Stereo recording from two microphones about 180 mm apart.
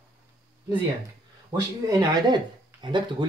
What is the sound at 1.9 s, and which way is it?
Speech, 25° right (ahead or behind).